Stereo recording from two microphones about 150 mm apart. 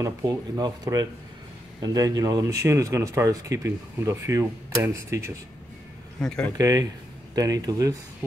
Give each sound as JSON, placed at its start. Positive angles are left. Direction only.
{"t": 0.0, "sound": "speech", "side_deg": -25}
{"t": 6.2, "sound": "speech", "side_deg": 5}
{"t": 6.6, "sound": "speech", "side_deg": -25}
{"t": 8.2, "sound": "a sound", "side_deg": -15}